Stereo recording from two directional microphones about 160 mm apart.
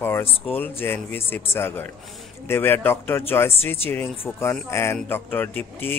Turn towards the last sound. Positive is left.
turn(degrees=10)  # may be behind; listen again after turning